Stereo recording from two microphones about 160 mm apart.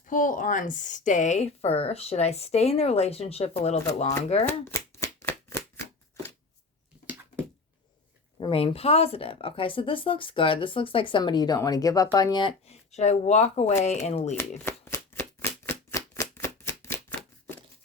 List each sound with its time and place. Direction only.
0.1 s speech: 55° left (ahead or behind)
4.4 s shuffling cards: 15° left (ahead or behind)
6.2 s a sound: 20° left (ahead or behind)
8.4 s speech: 35° left (ahead or behind)
14.6 s shuffling cards: 15° left (ahead or behind)